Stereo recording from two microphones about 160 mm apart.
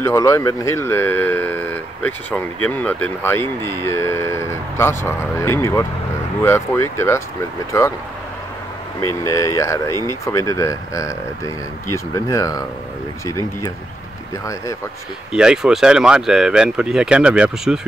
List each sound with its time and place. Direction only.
0.0 s speech: 20° left (ahead or behind)
9.2 s speech: 20° left (ahead or behind)
15.3 s speech: 5° right (ahead or behind)